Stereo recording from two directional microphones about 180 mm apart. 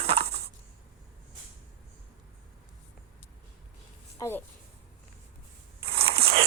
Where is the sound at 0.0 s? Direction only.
35° right (ahead or behind).